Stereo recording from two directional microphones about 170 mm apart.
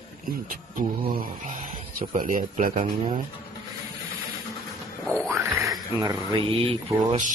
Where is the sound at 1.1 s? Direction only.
55° right (ahead or behind).